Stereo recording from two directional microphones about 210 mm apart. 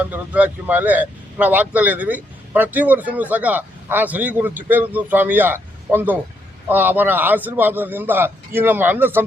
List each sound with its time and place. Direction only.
0.0 s speech: 5° right (ahead or behind)